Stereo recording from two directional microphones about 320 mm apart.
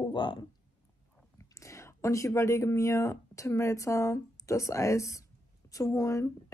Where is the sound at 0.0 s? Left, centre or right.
Centre.